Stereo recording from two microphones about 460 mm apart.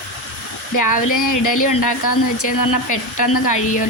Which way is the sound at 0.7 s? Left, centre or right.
Left.